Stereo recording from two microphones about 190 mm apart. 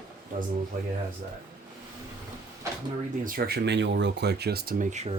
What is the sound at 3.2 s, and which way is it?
Speech, 50° right (ahead or behind).